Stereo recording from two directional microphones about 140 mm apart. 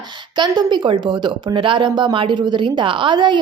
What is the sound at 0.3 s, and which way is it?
Speech, 30° right (ahead or behind).